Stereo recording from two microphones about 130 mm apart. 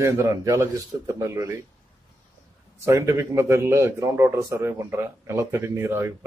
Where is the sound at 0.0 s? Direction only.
25° right (ahead or behind).